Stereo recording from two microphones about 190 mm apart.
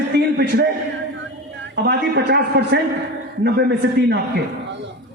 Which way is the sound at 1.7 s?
65° right (ahead or behind).